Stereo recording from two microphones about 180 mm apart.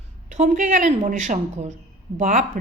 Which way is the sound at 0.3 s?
45° right (ahead or behind).